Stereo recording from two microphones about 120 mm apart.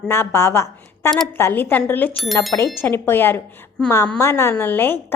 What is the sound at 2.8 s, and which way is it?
A woman's voice, 20° left (ahead or behind).